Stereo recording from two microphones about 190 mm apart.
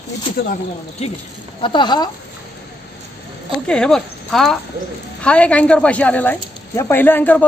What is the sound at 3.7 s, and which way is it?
A woman's voice, 5° left (ahead or behind).